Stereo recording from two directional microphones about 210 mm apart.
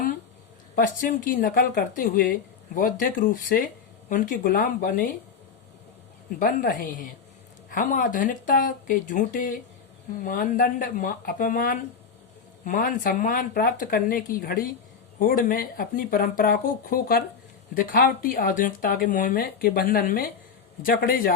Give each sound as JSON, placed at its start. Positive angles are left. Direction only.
{"t": 0.8, "sound": "speech", "side_deg": 40}
{"t": 6.4, "sound": "speech", "side_deg": 45}